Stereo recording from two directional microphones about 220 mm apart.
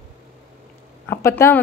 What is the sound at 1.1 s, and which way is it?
Speech, 10° left (ahead or behind).